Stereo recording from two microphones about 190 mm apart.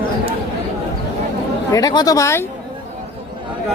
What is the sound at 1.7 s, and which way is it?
Speech, 20° left (ahead or behind).